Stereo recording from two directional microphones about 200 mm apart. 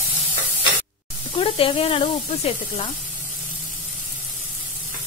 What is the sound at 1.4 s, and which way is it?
Speech, 25° left (ahead or behind).